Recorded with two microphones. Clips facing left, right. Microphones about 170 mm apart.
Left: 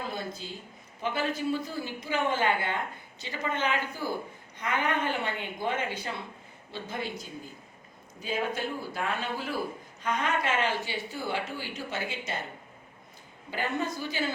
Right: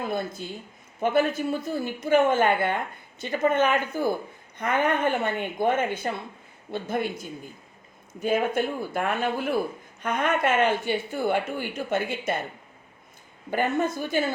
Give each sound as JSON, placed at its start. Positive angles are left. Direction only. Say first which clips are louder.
{"t": 0.0, "sound": "speech", "louder": "right 6 dB", "side_deg": -55}
{"t": 13.5, "sound": "speech", "louder": "right 7 dB", "side_deg": -50}